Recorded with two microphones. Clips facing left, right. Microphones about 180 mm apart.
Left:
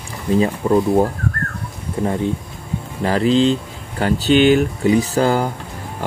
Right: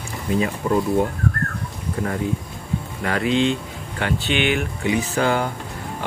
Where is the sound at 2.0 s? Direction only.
25° left (ahead or behind).